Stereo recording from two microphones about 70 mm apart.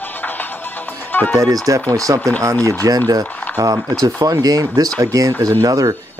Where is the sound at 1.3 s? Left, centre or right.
Right.